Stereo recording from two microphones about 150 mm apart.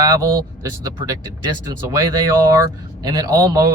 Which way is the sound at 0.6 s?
25° right (ahead or behind).